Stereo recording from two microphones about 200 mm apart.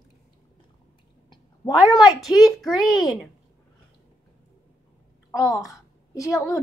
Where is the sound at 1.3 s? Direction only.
20° left (ahead or behind).